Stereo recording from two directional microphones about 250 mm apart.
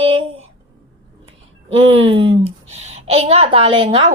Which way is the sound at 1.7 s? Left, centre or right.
Right.